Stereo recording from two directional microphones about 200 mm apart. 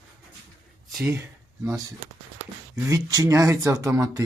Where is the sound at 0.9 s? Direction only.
Centre (ahead or behind).